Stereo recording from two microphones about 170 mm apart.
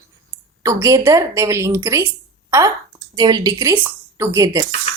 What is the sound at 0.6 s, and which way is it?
Speech, 15° right (ahead or behind).